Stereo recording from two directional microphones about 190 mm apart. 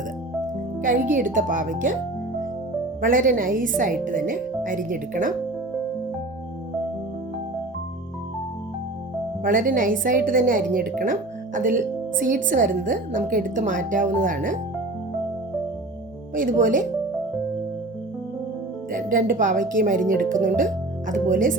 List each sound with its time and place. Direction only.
0.8 s a woman's voice: 45° right (ahead or behind)
3.0 s a woman's voice: 45° right (ahead or behind)
9.4 s a woman's voice: 45° right (ahead or behind)
16.3 s a woman's voice: 45° right (ahead or behind)
18.9 s a woman's voice: 45° right (ahead or behind)